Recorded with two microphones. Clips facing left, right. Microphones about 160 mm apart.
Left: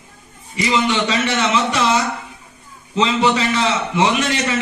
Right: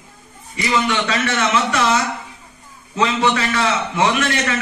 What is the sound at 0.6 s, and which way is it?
A man's voice, 20° left (ahead or behind).